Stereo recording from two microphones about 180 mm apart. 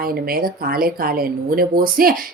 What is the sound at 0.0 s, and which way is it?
Speech, 55° right (ahead or behind).